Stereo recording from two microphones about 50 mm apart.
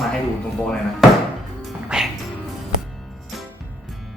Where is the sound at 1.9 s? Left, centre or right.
Centre.